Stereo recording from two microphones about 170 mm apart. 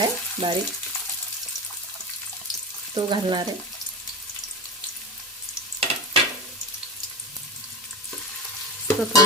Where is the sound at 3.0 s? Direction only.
25° right (ahead or behind).